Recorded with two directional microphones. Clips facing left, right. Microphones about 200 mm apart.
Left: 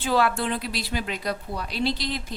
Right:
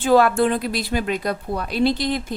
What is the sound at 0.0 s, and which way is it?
A woman's voice, 45° right (ahead or behind).